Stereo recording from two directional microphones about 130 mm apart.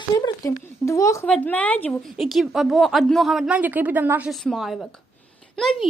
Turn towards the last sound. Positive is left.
turn(degrees=5)  # may be behind; listen again after turning